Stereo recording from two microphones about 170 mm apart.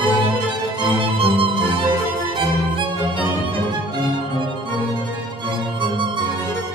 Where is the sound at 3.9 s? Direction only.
25° right (ahead or behind).